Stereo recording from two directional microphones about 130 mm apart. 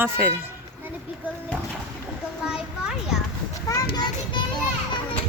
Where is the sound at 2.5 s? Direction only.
5° right (ahead or behind).